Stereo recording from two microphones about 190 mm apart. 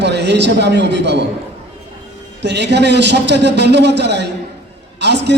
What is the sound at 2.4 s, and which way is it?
A man's voice, 65° right (ahead or behind).